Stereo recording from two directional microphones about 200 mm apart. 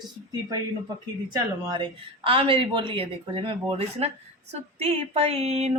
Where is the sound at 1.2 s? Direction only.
25° right (ahead or behind).